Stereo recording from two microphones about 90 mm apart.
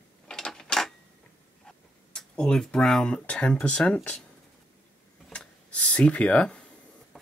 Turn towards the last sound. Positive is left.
turn(degrees=15)  # may be behind; listen again after turning